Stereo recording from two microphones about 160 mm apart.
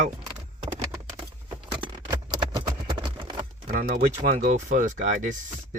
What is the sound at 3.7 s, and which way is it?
Speech, 50° right (ahead or behind).